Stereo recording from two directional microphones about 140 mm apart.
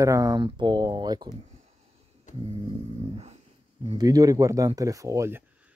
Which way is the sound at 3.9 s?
25° right (ahead or behind).